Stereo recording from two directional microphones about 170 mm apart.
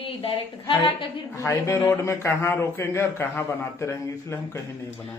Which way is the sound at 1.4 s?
15° left (ahead or behind).